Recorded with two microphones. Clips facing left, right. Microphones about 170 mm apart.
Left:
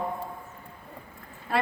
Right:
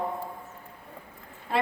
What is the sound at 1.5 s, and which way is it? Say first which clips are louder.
Speech: even; 20° right (ahead or behind).